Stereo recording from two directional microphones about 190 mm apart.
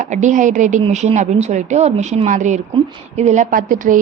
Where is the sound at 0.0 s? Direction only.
40° right (ahead or behind).